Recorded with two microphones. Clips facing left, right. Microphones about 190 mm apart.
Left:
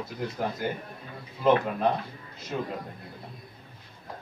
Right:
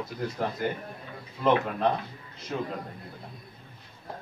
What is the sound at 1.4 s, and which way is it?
A man's voice, 5° left (ahead or behind).